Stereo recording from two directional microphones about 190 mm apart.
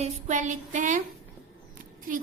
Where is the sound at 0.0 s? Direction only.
40° right (ahead or behind).